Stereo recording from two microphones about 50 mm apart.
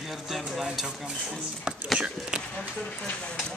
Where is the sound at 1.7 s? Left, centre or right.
Right.